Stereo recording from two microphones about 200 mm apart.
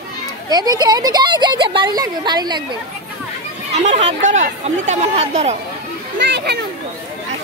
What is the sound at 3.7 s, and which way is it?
Speech, 35° right (ahead or behind).